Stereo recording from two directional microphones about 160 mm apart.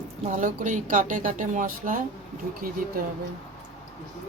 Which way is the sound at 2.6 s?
65° right (ahead or behind).